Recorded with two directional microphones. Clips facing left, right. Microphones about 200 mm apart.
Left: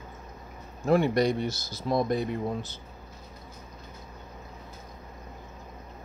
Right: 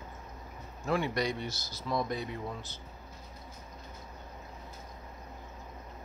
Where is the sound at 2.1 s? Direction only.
50° left (ahead or behind).